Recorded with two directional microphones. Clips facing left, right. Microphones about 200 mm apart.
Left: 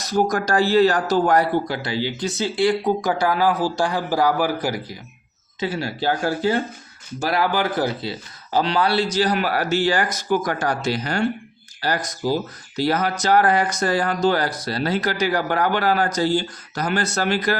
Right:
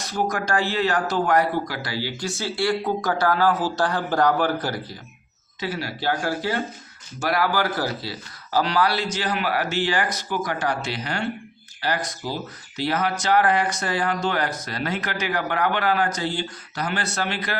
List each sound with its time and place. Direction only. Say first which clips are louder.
0.1 s speech: left 5 dB; 40° left (ahead or behind); by 4.9 s 10° left (ahead or behind)
5.5 s speech: left 4 dB; 25° left (ahead or behind); by 17.6 s 40° left (ahead or behind)